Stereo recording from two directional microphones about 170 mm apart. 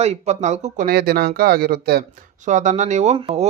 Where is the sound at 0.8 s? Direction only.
65° right (ahead or behind).